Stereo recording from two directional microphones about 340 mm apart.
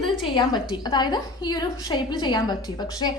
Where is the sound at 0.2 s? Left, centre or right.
Centre.